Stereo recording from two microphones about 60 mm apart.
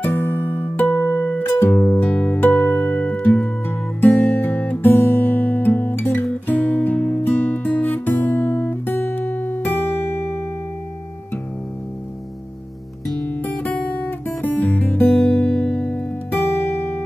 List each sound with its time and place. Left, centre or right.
0.0 s music: left
2.0 s music: centre
2.4 s music: left
3.4 s music: left
7.2 s guitar: left
13.7 s guitar: left
16.3 s music: left